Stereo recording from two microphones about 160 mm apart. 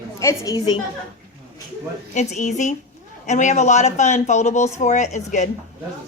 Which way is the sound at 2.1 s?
45° left (ahead or behind).